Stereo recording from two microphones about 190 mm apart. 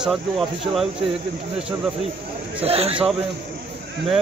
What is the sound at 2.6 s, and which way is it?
Speech, 30° right (ahead or behind).